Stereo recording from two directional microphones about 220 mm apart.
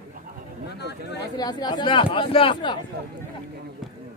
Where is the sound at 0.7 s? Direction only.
50° left (ahead or behind).